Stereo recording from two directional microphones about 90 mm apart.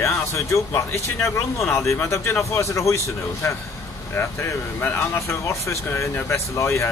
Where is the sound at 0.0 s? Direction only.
30° left (ahead or behind).